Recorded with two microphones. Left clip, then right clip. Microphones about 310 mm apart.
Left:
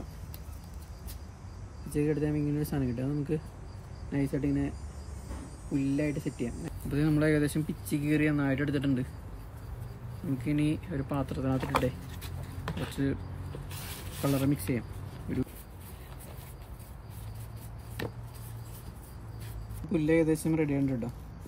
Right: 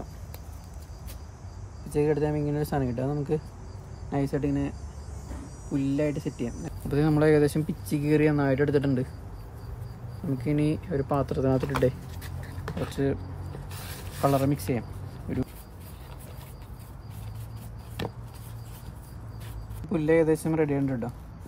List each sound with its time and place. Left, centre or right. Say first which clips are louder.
2.0 s speech: right 5 dB; right
5.8 s speech: right 4 dB; right
10.4 s speech: right 3 dB; right
13.0 s speech: right 5 dB; right
13.7 s mechanisms: right 1 dB; centre
14.7 s a sound: right 4 dB; right
19.9 s speech: right 4 dB; centre